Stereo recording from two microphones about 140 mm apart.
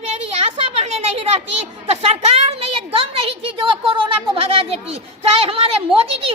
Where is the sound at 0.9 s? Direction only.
50° right (ahead or behind).